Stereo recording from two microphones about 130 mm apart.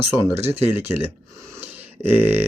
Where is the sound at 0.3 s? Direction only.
20° right (ahead or behind).